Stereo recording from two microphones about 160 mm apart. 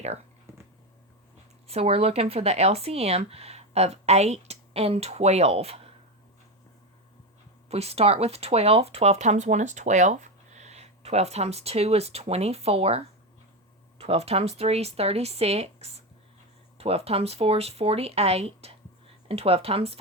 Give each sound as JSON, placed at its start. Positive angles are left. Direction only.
{"t": 0.5, "sound": "a sound", "side_deg": -15}
{"t": 1.6, "sound": "speech", "side_deg": -40}
{"t": 7.7, "sound": "speech", "side_deg": -40}